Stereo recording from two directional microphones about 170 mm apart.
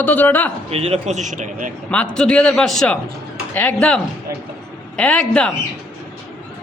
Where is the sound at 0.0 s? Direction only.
10° left (ahead or behind).